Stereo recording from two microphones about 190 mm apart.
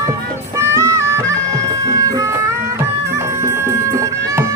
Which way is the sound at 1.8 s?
15° right (ahead or behind).